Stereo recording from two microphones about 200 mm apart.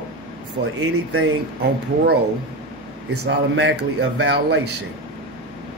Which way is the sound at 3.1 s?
60° right (ahead or behind).